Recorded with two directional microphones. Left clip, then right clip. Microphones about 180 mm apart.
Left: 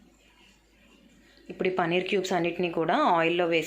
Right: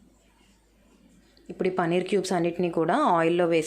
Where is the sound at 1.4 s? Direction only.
25° right (ahead or behind).